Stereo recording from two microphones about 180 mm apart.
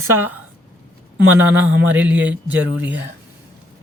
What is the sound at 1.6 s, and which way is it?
Speech, 10° right (ahead or behind).